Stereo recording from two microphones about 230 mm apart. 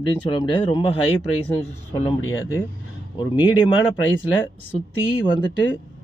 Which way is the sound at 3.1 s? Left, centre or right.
Centre.